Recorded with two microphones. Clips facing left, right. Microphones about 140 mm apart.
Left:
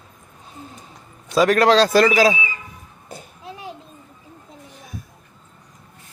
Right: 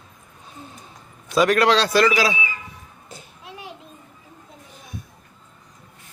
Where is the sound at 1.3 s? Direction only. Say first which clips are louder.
Left 2 dB; 35° left (ahead or behind).